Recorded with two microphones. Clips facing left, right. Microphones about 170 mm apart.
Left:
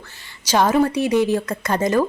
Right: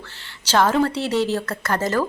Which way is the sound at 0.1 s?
10° left (ahead or behind).